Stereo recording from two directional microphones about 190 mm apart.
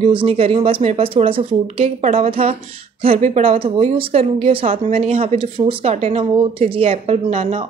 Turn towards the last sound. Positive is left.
turn(degrees=-35)  # may be behind; listen again after turning